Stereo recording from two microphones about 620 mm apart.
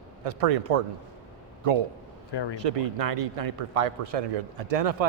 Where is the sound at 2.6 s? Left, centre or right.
Right.